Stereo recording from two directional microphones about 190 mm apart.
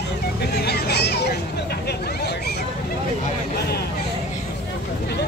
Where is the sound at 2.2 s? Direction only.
60° left (ahead or behind).